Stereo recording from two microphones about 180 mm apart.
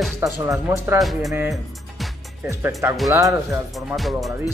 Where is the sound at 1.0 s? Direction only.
Centre (ahead or behind).